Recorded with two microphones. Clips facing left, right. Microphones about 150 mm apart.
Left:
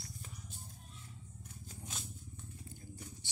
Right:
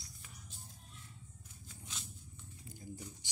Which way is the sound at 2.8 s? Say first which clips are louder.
Right 3 dB; 15° right (ahead or behind).